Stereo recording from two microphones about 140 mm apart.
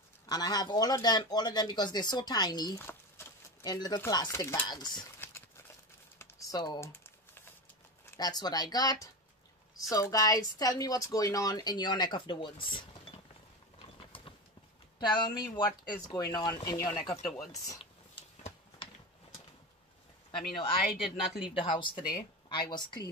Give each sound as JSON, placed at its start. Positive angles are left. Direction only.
{"t": 0.3, "sound": "speech", "side_deg": 30}
{"t": 2.8, "sound": "a sound", "side_deg": 15}
{"t": 3.6, "sound": "speech", "side_deg": 30}
{"t": 6.1, "sound": "typing", "side_deg": 25}
{"t": 6.8, "sound": "typing", "side_deg": 20}
{"t": 8.0, "sound": "speech", "side_deg": 30}
{"t": 13.7, "sound": "mechanisms", "side_deg": 40}
{"t": 15.0, "sound": "speech", "side_deg": 30}
{"t": 21.3, "sound": "speech", "side_deg": -5}
{"t": 21.5, "sound": "a woman's voice", "side_deg": 35}